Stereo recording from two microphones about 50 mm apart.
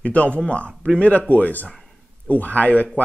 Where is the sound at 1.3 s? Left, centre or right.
Left.